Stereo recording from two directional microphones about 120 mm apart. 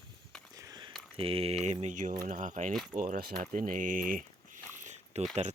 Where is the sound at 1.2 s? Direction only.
50° right (ahead or behind).